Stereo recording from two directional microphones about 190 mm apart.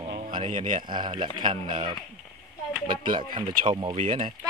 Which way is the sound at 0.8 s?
25° right (ahead or behind).